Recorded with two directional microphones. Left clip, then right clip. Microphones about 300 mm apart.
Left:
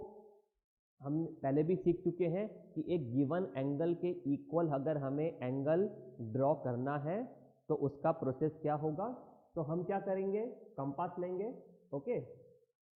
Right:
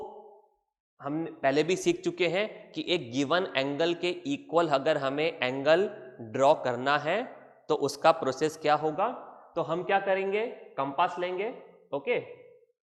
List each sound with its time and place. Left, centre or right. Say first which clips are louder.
1.0 s a man's voice: right 9 dB; centre
7.7 s a man's voice: right 8 dB; right
8.0 s a man's voice: right 13 dB; centre